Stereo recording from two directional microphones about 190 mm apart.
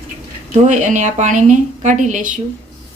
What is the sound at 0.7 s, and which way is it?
A woman's voice, 40° right (ahead or behind).